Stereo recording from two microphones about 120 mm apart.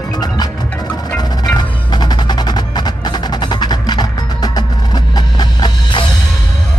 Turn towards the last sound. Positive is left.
turn(degrees=40)  # may be behind; listen again after turning